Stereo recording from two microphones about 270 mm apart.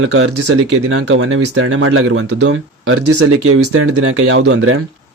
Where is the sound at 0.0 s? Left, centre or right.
Right.